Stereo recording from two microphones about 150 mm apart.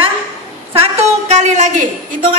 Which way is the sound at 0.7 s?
50° right (ahead or behind).